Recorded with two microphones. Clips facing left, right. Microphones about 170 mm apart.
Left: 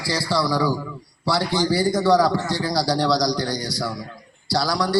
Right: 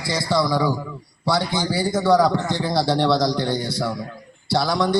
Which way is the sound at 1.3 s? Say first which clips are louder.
Right 1 dB; 10° left (ahead or behind).